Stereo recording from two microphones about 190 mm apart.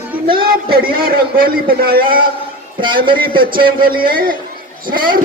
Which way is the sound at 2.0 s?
25° right (ahead or behind).